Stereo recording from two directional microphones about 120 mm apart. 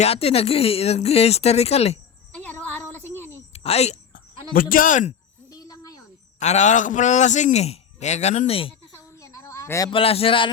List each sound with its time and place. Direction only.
0.0 s speech: 55° left (ahead or behind)
2.3 s music: 10° left (ahead or behind)
3.5 s a sound: 60° left (ahead or behind)
4.9 s speech: 90° left
5.5 s cricket: 30° left (ahead or behind)
6.4 s a man's voice: 75° left (ahead or behind); by 8.7 s 55° left (ahead or behind)
9.1 s a sound: 25° left (ahead or behind)
9.9 s a man's voice: 50° left (ahead or behind)